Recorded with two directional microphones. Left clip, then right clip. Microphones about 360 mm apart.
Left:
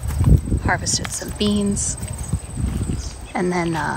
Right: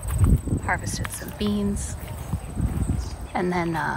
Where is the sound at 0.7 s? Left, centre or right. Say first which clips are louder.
Left 6 dB; centre.